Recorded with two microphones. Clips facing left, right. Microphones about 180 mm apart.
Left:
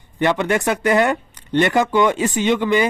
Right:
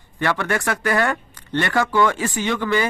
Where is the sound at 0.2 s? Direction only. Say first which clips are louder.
Left 4 dB; 20° left (ahead or behind).